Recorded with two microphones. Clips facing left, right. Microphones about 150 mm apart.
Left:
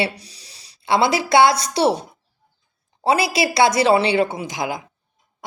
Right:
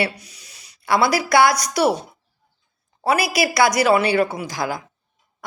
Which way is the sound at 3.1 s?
25° left (ahead or behind).